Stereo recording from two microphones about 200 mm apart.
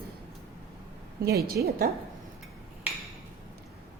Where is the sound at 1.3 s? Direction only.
50° right (ahead or behind).